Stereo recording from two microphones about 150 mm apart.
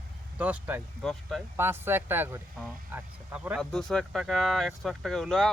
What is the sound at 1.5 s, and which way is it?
Speech, 15° right (ahead or behind).